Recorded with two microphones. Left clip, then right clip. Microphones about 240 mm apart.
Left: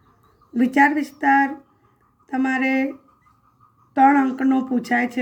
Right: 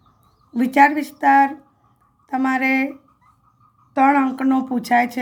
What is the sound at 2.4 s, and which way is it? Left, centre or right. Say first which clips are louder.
Speech: right 2 dB; right.